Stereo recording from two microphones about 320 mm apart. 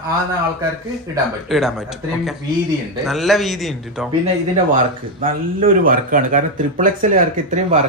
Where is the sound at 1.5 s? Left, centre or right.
Centre.